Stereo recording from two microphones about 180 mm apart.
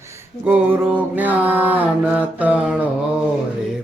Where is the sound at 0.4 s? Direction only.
5° right (ahead or behind).